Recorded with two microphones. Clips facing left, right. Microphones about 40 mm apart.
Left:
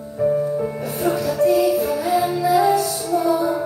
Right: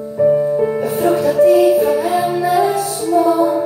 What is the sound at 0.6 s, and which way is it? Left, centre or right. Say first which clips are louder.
Music: right 8 dB; right.